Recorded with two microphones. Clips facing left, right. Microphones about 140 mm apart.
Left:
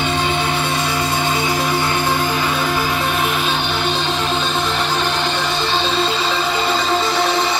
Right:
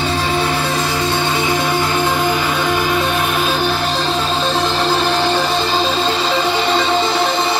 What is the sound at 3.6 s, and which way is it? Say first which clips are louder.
Music: right 2 dB; 35° right (ahead or behind).